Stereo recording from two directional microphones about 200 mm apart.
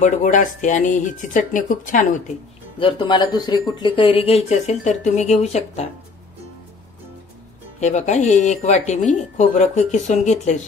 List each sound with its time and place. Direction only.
0.0 s speech: 40° left (ahead or behind)
2.8 s speech: 25° left (ahead or behind)
7.8 s speech: 35° left (ahead or behind)